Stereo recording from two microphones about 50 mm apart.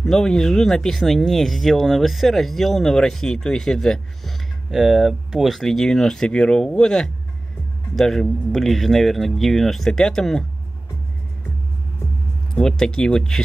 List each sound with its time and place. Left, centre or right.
0.0 s speech: centre
5.5 s speech: centre
12.5 s speech: centre